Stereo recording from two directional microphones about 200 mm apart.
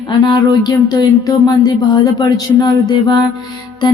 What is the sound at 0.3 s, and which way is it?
Speech, 20° left (ahead or behind).